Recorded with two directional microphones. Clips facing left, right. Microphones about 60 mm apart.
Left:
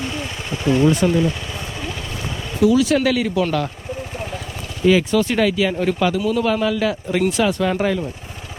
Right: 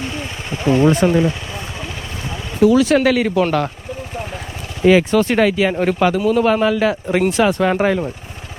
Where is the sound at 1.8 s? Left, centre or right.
Right.